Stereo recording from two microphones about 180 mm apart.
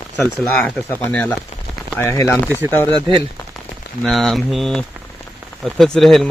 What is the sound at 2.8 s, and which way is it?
Speech, 25° right (ahead or behind).